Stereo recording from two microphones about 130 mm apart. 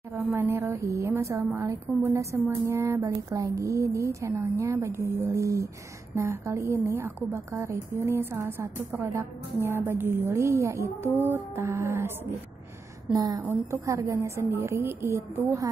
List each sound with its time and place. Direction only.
0.1 s a woman's voice: 15° right (ahead or behind)
13.1 s speech: 30° right (ahead or behind)
13.4 s a woman's voice: 15° right (ahead or behind)